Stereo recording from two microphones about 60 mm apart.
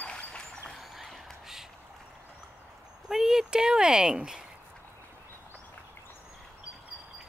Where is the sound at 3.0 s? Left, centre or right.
Centre.